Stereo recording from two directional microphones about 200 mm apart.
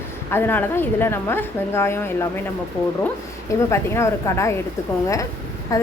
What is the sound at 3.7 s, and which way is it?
Speech, 15° left (ahead or behind).